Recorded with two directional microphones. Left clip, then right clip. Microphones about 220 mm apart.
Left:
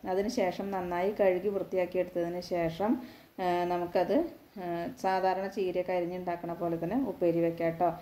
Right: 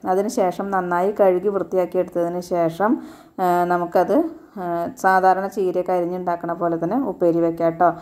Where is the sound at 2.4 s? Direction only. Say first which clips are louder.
Right 12 dB; 20° right (ahead or behind).